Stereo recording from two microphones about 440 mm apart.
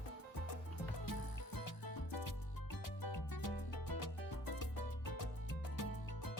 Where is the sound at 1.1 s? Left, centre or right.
Left.